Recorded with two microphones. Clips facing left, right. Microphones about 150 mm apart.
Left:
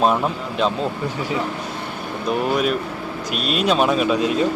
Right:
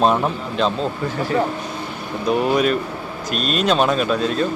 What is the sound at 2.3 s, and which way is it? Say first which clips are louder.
Speech: right 3 dB; centre (ahead or behind).